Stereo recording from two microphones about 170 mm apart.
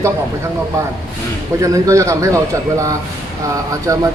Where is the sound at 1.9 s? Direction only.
15° right (ahead or behind).